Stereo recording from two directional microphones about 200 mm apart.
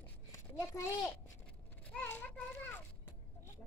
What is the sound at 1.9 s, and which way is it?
Children playing, 10° left (ahead or behind).